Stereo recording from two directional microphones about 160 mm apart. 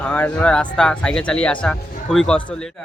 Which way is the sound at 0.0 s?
10° left (ahead or behind).